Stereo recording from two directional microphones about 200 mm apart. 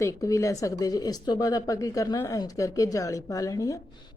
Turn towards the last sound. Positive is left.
turn(degrees=15)  # may be behind; listen again after turning